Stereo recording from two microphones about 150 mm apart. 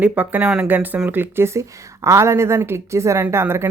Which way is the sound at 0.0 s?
10° right (ahead or behind).